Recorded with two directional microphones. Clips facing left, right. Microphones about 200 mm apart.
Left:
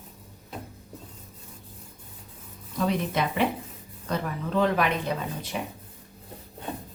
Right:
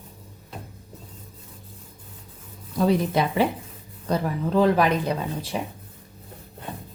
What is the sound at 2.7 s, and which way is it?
Speech, 35° right (ahead or behind).